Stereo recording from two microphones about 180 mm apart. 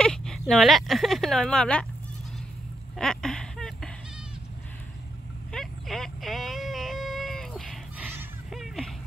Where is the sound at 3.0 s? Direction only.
5° left (ahead or behind).